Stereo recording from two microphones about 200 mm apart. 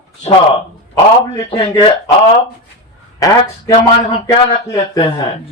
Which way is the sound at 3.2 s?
15° left (ahead or behind).